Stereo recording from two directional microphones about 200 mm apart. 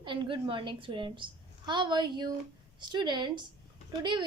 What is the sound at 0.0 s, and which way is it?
A woman's voice, 25° right (ahead or behind).